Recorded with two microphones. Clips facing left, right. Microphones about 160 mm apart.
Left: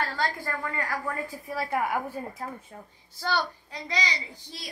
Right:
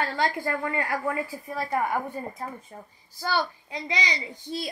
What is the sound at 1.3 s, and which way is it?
A woman's voice, 5° left (ahead or behind).